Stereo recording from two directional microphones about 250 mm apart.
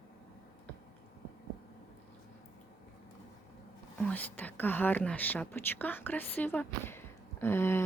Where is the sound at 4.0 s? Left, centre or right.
Centre.